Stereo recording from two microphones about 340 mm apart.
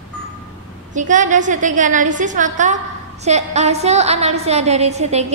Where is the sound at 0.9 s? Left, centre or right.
Right.